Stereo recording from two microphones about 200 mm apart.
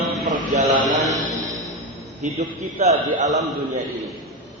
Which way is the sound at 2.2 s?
35° right (ahead or behind).